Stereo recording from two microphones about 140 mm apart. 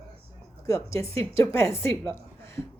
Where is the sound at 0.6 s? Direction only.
20° left (ahead or behind).